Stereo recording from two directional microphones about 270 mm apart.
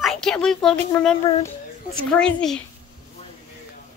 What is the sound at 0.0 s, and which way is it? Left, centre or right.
A woman's voice, centre.